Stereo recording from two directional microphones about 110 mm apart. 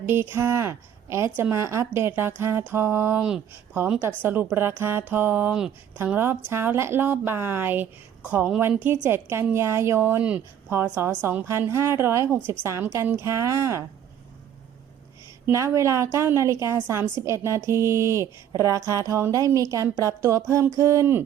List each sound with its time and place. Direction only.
0.0 s a woman's voice: 20° right (ahead or behind)
3.2 s speech: 5° right (ahead or behind)
4.2 s a woman's voice: 20° right (ahead or behind)
15.5 s a woman's voice: 25° right (ahead or behind)